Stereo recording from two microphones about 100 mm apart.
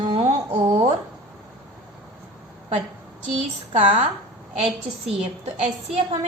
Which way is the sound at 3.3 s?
90° right.